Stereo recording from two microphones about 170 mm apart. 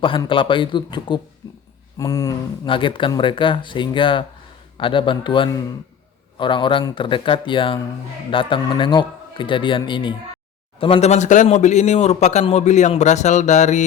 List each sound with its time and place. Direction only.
0.0 s speech: 30° left (ahead or behind)